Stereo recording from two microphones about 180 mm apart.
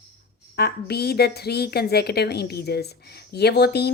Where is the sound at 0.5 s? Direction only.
65° left (ahead or behind).